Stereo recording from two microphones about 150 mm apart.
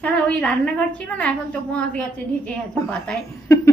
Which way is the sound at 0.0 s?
10° left (ahead or behind).